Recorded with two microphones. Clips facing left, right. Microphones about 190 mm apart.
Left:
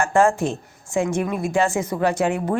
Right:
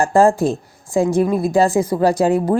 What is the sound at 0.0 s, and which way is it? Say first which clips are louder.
Speech: right 4 dB; 35° right (ahead or behind).